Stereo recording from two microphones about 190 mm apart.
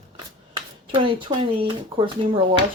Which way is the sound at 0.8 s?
25° right (ahead or behind).